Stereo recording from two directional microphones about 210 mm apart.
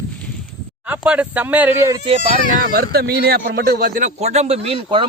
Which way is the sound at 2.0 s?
25° right (ahead or behind).